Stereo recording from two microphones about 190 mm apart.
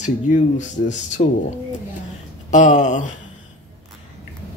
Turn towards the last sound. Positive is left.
turn(degrees=40)  # may be behind; listen again after turning